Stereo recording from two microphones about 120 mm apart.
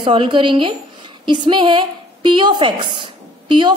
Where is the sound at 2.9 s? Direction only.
40° right (ahead or behind).